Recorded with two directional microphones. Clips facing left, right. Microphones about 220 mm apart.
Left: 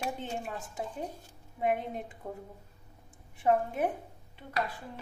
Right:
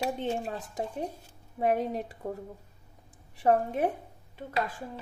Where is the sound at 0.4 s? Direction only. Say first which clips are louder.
Right 4 dB; 30° right (ahead or behind).